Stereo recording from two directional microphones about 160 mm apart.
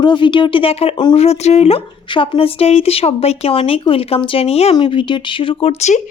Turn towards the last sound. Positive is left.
turn(degrees=40)  # may be behind; listen again after turning